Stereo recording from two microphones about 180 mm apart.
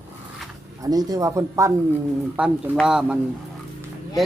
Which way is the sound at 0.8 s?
20° right (ahead or behind).